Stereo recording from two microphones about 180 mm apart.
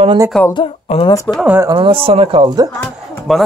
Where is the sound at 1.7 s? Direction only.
30° right (ahead or behind).